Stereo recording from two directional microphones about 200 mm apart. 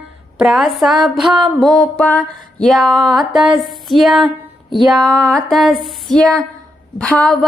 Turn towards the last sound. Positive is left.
turn(degrees=5)  # may be behind; listen again after turning